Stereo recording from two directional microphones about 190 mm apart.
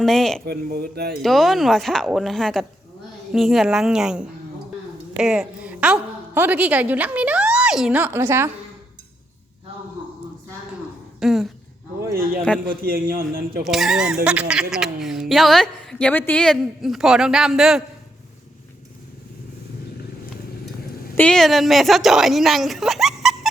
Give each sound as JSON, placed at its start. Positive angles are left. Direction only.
{"t": 0.0, "sound": "a woman's voice", "side_deg": 0}
{"t": 0.4, "sound": "speech", "side_deg": -55}
{"t": 1.2, "sound": "a woman's voice", "side_deg": 0}
{"t": 11.2, "sound": "a woman's voice", "side_deg": 0}
{"t": 12.6, "sound": "a man's voice", "side_deg": -50}
{"t": 13.7, "sound": "a woman's voice", "side_deg": 0}
{"t": 21.2, "sound": "a woman's voice", "side_deg": 5}